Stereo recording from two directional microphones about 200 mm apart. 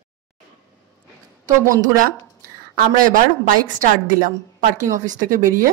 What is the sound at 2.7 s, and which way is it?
A woman's voice, 45° right (ahead or behind).